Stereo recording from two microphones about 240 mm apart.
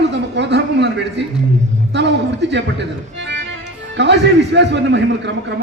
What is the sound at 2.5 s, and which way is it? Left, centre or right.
A man's voice, right.